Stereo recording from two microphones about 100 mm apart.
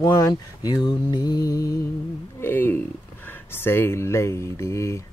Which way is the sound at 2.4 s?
20° left (ahead or behind).